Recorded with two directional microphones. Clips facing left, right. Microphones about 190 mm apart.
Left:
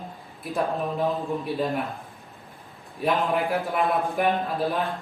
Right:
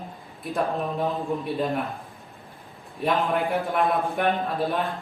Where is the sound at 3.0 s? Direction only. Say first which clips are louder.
Even; centre (ahead or behind).